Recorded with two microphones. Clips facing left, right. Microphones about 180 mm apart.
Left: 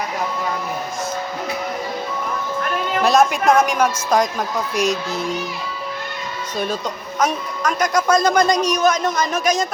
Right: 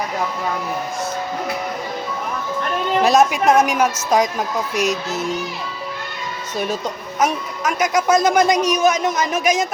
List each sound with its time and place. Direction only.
3.0 s a woman's voice: centre (ahead or behind)
7.2 s a man's voice: 10° right (ahead or behind)